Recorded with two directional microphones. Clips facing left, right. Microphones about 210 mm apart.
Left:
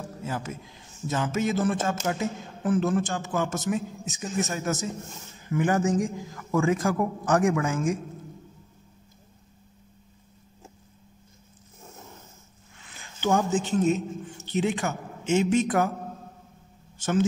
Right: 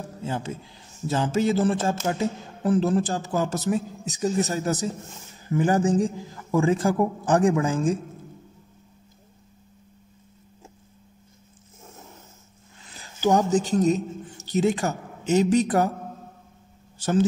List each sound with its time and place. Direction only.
0.2 s a man's voice: 30° right (ahead or behind)
12.9 s a man's voice: 40° right (ahead or behind)